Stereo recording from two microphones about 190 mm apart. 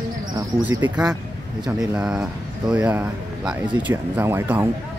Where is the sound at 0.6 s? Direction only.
5° right (ahead or behind).